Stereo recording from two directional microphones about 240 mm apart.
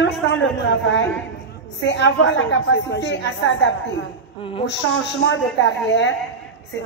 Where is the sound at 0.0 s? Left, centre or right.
Left.